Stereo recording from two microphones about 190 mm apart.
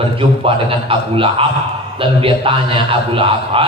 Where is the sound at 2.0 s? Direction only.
25° right (ahead or behind).